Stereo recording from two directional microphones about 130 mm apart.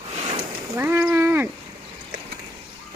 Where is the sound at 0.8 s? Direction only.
15° right (ahead or behind).